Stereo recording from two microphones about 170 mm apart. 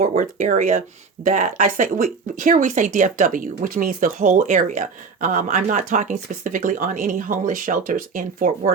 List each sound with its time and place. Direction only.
0.0 s speech: 50° right (ahead or behind)